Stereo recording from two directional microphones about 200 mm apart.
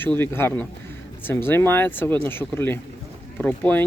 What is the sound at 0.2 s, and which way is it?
Speech, 10° left (ahead or behind).